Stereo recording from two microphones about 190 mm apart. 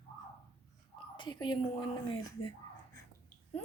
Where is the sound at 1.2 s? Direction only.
25° left (ahead or behind).